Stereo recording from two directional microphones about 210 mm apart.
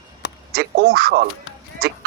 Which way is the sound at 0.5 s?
45° right (ahead or behind).